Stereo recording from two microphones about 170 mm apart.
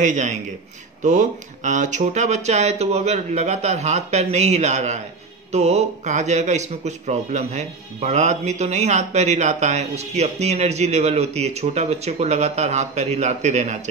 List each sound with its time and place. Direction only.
0.0 s speech: 45° right (ahead or behind)